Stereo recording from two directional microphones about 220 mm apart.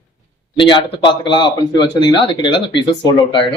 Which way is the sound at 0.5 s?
20° left (ahead or behind).